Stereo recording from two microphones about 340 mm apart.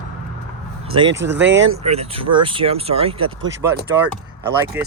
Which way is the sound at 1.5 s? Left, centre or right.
Right.